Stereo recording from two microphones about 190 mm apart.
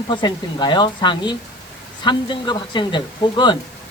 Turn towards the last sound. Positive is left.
turn(degrees=25)  # may be behind; listen again after turning